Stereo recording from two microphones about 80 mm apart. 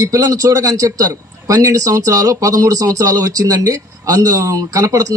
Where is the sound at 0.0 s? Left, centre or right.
Right.